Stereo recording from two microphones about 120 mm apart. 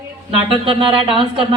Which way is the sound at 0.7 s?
45° right (ahead or behind).